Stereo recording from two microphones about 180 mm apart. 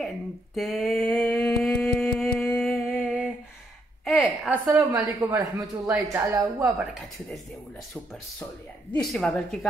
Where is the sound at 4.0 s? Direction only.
Centre (ahead or behind).